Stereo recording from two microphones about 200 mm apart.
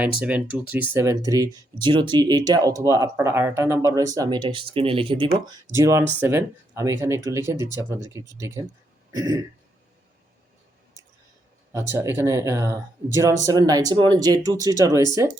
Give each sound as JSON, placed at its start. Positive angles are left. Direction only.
{"t": 0.0, "sound": "speech", "side_deg": -5}
{"t": 5.7, "sound": "speech", "side_deg": -15}
{"t": 11.7, "sound": "speech", "side_deg": -15}